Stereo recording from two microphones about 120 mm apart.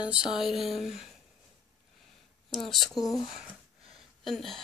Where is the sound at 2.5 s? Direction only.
Centre (ahead or behind).